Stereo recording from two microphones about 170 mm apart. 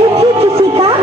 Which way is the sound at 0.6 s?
35° right (ahead or behind).